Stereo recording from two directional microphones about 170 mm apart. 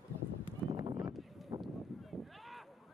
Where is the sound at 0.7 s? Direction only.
20° right (ahead or behind).